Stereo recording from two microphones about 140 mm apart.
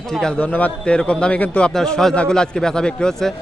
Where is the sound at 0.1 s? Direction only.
5° left (ahead or behind).